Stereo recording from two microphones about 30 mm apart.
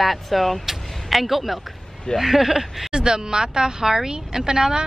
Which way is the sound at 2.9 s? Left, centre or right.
Right.